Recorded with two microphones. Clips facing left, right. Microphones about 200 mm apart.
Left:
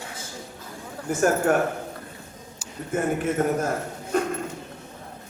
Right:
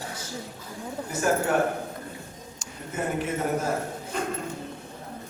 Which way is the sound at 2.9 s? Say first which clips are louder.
Left 5 dB; 50° left (ahead or behind).